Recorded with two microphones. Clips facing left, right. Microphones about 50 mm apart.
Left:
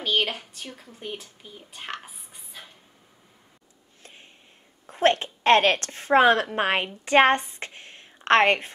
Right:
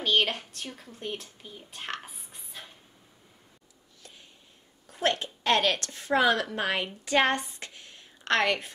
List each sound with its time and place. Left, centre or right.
0.0 s a woman's voice: centre
4.0 s a sound: left
4.8 s a woman's voice: left